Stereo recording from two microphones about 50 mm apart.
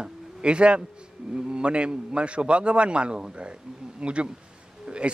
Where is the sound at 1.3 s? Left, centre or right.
Centre.